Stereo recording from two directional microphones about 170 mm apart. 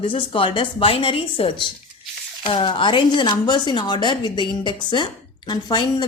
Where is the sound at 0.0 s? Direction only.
30° left (ahead or behind).